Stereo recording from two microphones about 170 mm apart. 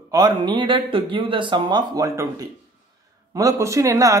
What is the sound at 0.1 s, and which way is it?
Speech, 25° right (ahead or behind).